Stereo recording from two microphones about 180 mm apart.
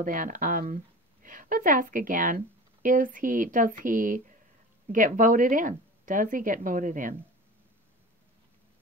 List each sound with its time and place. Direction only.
0.0 s a woman's voice: 50° right (ahead or behind)